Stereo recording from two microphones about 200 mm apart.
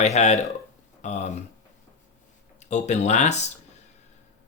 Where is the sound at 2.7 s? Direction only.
35° left (ahead or behind).